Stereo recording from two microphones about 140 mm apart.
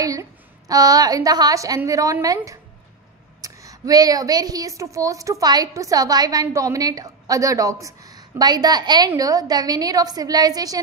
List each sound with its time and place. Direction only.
0.0 s a woman's voice: 25° right (ahead or behind)